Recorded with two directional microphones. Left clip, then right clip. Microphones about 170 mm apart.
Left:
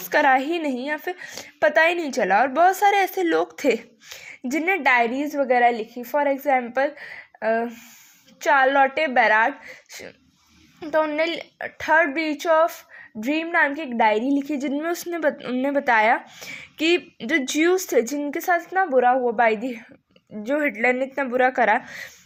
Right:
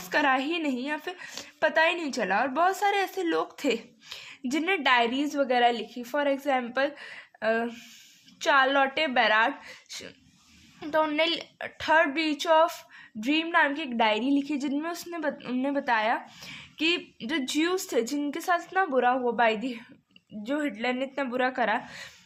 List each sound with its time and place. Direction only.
0.1 s speech: 25° left (ahead or behind)